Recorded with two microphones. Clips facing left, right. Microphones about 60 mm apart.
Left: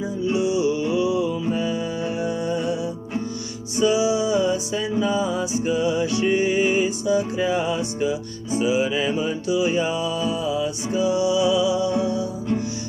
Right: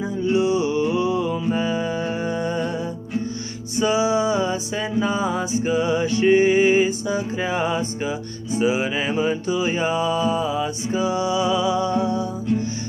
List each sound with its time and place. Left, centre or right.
0.3 s music: right
3.7 s music: right